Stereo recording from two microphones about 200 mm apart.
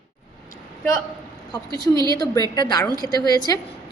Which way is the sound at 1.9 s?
20° right (ahead or behind).